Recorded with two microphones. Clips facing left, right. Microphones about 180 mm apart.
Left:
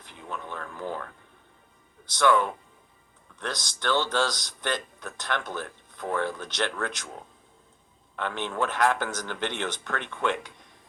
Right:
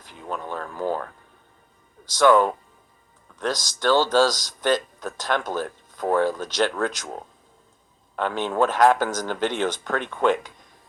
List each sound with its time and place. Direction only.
0.0 s speech: 40° right (ahead or behind)
2.1 s speech: 45° right (ahead or behind)